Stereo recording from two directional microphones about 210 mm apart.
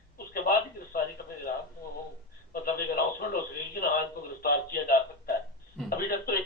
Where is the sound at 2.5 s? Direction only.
45° left (ahead or behind).